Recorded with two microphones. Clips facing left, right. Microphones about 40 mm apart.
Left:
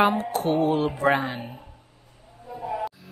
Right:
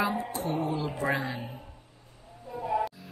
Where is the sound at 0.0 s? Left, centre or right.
Left.